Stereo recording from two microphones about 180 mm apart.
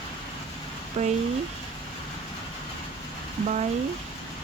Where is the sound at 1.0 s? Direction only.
45° right (ahead or behind).